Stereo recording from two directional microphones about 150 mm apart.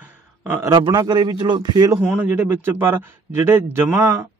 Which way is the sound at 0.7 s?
30° right (ahead or behind).